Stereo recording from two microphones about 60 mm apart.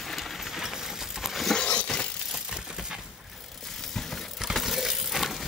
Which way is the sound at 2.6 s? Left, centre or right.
Centre.